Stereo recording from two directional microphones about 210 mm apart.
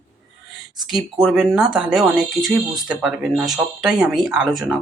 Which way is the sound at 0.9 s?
Centre (ahead or behind).